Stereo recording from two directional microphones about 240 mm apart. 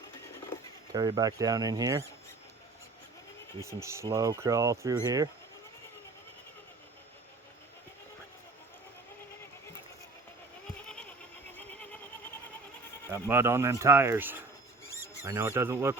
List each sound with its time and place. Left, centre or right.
0.9 s speech: centre
3.6 s speech: centre
11.7 s goat: centre
13.1 s speech: centre